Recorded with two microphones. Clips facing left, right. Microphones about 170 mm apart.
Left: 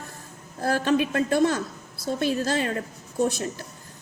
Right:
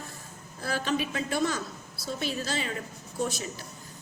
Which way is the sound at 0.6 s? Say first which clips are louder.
Left 7 dB; 50° left (ahead or behind).